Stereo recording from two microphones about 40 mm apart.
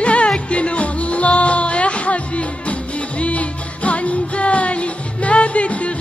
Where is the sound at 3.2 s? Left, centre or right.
Left.